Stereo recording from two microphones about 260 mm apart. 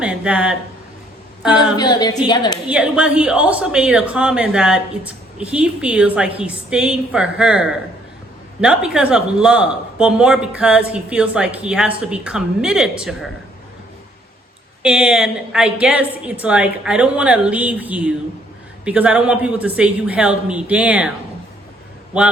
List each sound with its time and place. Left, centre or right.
0.0 s speech: centre
1.7 s a woman's voice: centre
2.6 s speech: centre
14.8 s speech: centre